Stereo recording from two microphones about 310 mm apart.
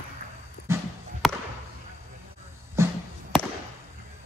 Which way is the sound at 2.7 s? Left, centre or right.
Centre.